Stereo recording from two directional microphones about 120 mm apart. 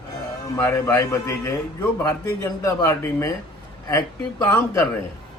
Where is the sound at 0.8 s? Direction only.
25° left (ahead or behind).